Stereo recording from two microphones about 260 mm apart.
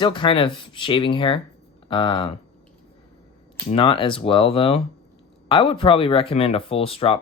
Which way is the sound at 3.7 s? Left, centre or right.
Centre.